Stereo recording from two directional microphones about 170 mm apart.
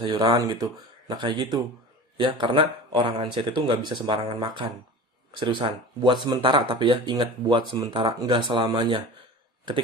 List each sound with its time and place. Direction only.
0.1 s speech: 25° right (ahead or behind)